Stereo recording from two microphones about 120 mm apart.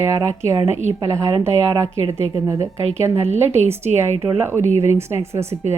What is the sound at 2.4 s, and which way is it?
Speech, 25° right (ahead or behind).